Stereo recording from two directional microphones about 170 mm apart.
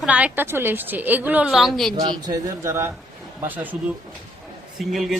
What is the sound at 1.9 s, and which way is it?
Speech, 20° right (ahead or behind).